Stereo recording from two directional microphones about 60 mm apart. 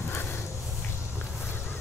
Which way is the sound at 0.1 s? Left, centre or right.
Left.